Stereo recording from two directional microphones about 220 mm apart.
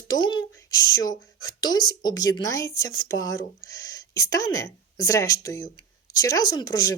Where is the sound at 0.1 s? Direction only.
20° left (ahead or behind).